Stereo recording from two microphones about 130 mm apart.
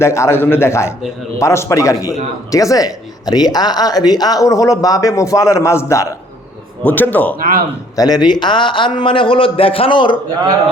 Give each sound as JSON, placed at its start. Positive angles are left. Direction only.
{"t": 0.0, "sound": "speech", "side_deg": 20}
{"t": 6.8, "sound": "a man's voice", "side_deg": 15}
{"t": 7.3, "sound": "speech", "side_deg": -90}
{"t": 7.9, "sound": "a man's voice", "side_deg": 30}